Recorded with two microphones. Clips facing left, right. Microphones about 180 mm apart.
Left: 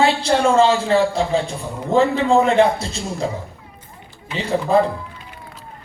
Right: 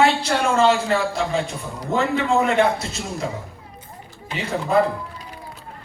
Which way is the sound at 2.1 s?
30° left (ahead or behind).